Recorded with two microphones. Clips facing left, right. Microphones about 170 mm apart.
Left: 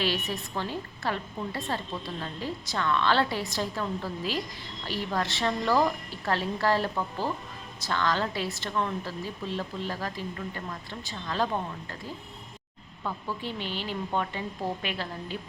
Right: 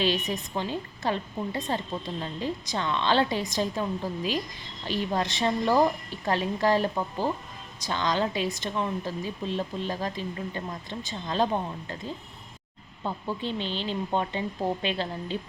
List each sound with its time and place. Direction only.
0.0 s a woman's voice: 20° right (ahead or behind)
13.0 s a woman's voice: 25° right (ahead or behind)